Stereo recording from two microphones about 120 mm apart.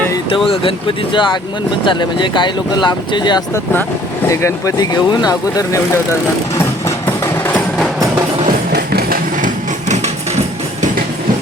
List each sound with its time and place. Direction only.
0.4 s speech: 50° left (ahead or behind)
4.3 s speech: 25° left (ahead or behind)
6.8 s a sound: 20° left (ahead or behind)